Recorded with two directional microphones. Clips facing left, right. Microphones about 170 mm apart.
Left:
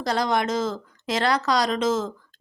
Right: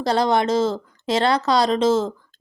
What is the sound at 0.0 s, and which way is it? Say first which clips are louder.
A woman's voice: right 4 dB; 30° right (ahead or behind).